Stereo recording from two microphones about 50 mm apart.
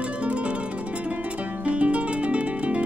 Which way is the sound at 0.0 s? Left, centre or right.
Right.